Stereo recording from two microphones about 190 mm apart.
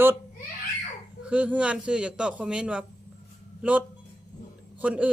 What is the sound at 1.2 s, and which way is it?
A man's voice, 5° right (ahead or behind).